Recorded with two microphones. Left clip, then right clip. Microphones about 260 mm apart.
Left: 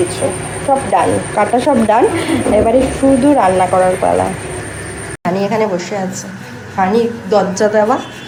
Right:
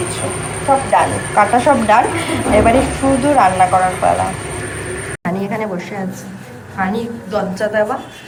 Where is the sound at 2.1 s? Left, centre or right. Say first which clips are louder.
Left 1 dB; centre.